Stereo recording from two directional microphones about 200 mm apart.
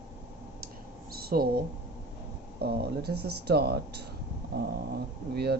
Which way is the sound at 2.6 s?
55° right (ahead or behind).